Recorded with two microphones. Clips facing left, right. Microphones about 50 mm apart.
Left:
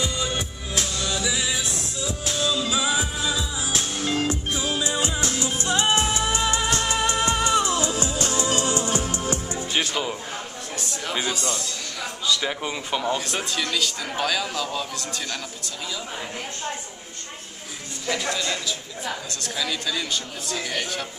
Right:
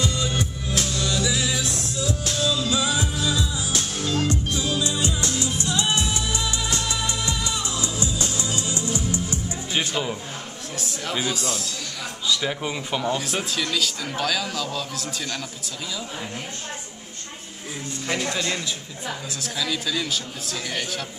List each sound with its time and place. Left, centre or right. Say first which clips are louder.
0.0 s music: right 2 dB; centre; by 9.6 s left
9.8 s music: even; centre
10.8 s a sound: right 1 dB; centre
12.4 s speech: right 1 dB; centre
18.3 s a man's voice: even; centre
19.3 s speech: right 1 dB; centre